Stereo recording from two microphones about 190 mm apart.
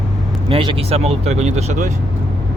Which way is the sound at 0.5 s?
30° right (ahead or behind).